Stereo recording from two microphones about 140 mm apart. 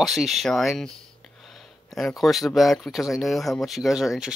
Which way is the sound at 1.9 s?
Centre (ahead or behind).